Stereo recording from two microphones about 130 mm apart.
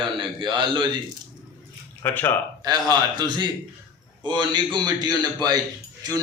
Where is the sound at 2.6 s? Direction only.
30° right (ahead or behind).